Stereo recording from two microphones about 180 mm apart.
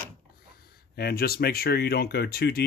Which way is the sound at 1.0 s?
60° left (ahead or behind).